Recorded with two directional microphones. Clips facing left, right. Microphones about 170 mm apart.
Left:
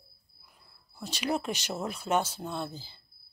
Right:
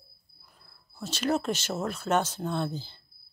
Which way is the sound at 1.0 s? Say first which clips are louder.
Right 3 dB; 15° left (ahead or behind).